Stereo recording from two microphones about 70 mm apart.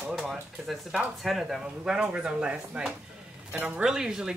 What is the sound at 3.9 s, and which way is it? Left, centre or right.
Speech, centre.